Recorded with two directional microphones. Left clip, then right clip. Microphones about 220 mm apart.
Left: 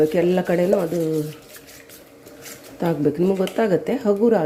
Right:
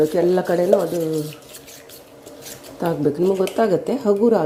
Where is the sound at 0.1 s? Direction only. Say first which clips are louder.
Right 1 dB; 10° left (ahead or behind).